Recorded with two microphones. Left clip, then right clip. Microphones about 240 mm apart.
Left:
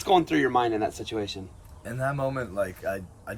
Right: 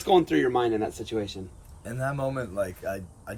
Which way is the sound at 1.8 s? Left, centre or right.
Centre.